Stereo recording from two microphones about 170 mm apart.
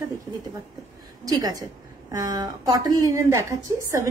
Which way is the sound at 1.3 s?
20° right (ahead or behind).